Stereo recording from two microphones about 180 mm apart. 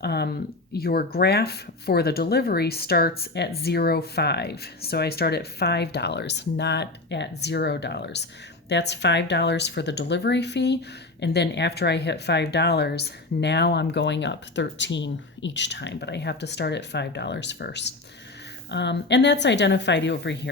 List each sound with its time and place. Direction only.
0.0 s speech: 65° left (ahead or behind)